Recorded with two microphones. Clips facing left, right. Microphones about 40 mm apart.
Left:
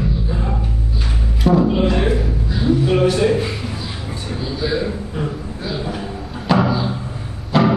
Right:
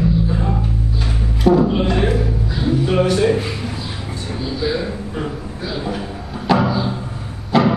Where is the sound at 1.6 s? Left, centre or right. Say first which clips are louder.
Even; centre.